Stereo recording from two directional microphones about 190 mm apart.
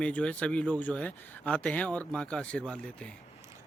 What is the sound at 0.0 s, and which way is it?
Speech, 5° left (ahead or behind).